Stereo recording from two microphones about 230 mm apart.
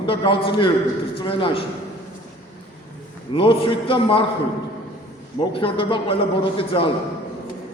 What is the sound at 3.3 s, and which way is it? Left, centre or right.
Speech, left.